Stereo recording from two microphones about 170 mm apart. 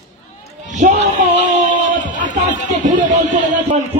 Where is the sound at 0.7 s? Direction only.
45° right (ahead or behind).